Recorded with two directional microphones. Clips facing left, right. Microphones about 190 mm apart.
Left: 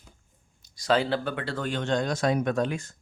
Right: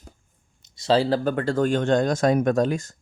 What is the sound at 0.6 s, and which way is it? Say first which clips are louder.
Speech: right 4 dB; 25° right (ahead or behind).